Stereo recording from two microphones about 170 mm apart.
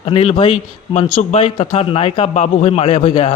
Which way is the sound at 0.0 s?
35° left (ahead or behind).